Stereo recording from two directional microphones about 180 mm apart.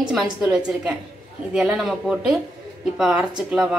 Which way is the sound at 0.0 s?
5° right (ahead or behind).